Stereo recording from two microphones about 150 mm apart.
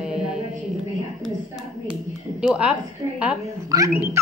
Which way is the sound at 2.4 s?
5° right (ahead or behind).